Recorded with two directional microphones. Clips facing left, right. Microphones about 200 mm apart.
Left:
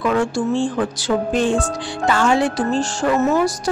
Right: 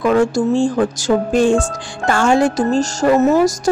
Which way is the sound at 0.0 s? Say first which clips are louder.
Right 5 dB; 40° right (ahead or behind).